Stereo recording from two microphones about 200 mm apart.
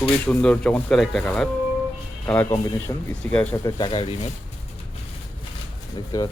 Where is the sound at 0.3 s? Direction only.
5° left (ahead or behind); by 4.3 s 25° left (ahead or behind).